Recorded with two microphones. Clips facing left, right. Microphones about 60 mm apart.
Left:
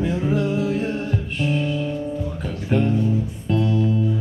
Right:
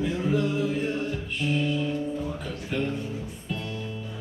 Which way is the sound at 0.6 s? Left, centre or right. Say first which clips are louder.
Left 4 dB; left.